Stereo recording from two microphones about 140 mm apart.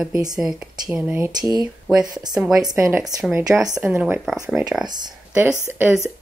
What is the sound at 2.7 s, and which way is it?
Speech, 20° right (ahead or behind).